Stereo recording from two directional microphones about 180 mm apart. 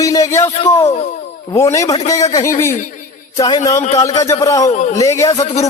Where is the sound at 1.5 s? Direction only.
15° left (ahead or behind).